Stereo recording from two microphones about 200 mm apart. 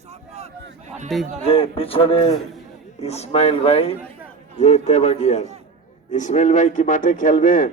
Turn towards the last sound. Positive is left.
turn(degrees=40)  # may be behind; listen again after turning